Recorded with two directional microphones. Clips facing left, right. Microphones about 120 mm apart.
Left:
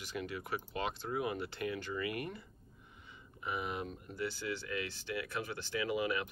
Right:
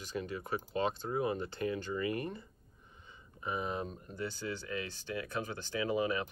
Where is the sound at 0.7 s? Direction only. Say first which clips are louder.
Right 4 dB; 30° right (ahead or behind).